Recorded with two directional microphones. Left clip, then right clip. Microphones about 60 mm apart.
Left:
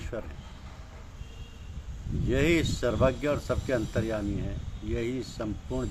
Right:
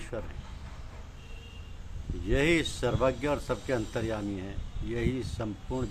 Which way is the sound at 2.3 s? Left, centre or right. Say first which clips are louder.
Left 1 dB; right.